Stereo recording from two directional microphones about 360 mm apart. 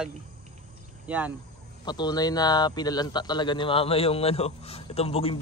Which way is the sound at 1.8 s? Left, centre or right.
Centre.